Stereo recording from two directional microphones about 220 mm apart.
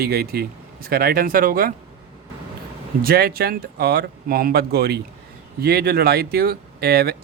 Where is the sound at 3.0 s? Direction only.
45° right (ahead or behind).